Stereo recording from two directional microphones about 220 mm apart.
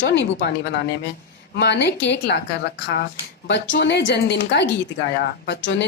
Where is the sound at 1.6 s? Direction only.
50° left (ahead or behind).